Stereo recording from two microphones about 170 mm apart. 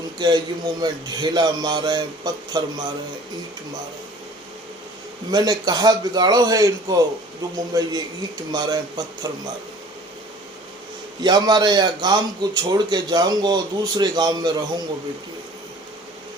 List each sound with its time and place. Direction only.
0.2 s a man's voice: 25° right (ahead or behind)
5.3 s a man's voice: 25° right (ahead or behind)
11.2 s a man's voice: 25° right (ahead or behind)